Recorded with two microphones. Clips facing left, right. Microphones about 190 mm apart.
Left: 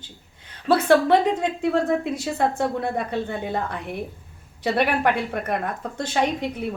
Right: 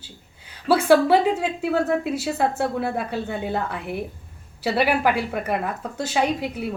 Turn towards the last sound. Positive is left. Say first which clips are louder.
# even
turn(degrees=-5)  # may be behind; listen again after turning